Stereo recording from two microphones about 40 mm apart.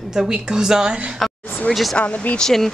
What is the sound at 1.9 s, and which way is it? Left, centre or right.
Speech, left.